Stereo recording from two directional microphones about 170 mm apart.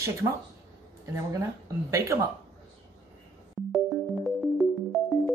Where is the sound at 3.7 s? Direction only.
Centre (ahead or behind).